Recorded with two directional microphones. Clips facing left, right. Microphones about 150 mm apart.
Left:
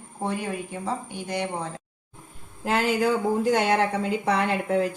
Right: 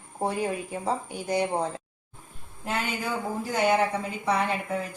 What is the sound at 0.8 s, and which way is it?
Speech, 35° right (ahead or behind).